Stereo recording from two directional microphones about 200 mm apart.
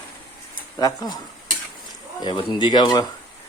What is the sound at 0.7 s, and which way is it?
Speech, 20° left (ahead or behind).